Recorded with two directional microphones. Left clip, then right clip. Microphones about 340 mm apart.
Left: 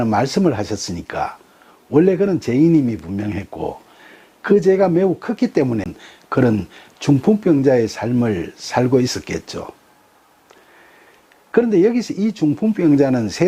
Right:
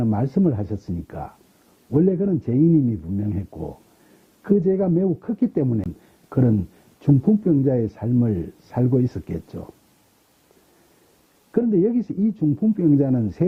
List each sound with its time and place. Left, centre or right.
0.0 s speech: centre
3.5 s speech: left
4.4 s speech: centre
11.5 s speech: centre